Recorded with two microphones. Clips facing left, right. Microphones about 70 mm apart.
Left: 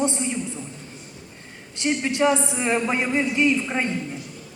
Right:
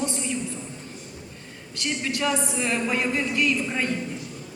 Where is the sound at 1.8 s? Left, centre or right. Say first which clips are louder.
Left 6 dB; left.